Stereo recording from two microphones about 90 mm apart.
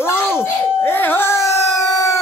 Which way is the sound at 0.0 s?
25° left (ahead or behind).